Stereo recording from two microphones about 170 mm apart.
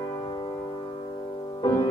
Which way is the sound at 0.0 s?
25° left (ahead or behind).